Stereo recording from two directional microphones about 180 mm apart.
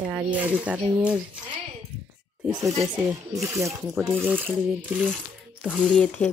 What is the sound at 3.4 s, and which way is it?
Speech, centre (ahead or behind).